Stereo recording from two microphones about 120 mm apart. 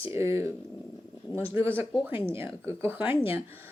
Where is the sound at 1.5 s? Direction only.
20° right (ahead or behind).